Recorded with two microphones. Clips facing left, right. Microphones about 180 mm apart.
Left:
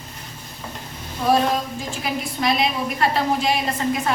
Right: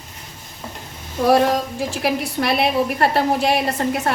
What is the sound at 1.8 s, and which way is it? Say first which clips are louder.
A woman's voice: right 5 dB; 70° right (ahead or behind).